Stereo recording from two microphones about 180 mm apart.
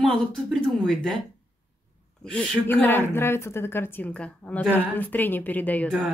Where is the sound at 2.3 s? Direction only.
5° left (ahead or behind).